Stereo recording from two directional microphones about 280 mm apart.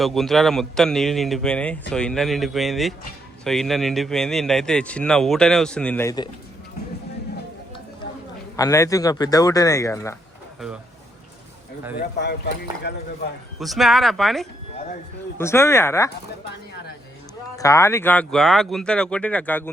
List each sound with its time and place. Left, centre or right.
0.0 s speech: centre
8.5 s speech: centre
12.2 s speech: left
13.6 s speech: centre
17.6 s speech: centre